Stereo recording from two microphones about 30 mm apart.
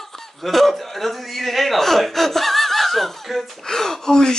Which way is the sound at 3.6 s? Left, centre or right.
Centre.